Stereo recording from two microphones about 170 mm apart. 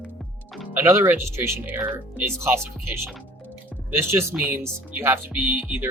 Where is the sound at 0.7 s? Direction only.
15° right (ahead or behind).